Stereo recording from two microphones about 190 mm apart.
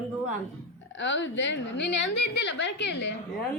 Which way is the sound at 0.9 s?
70° left (ahead or behind).